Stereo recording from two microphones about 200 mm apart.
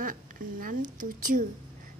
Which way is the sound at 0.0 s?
45° right (ahead or behind).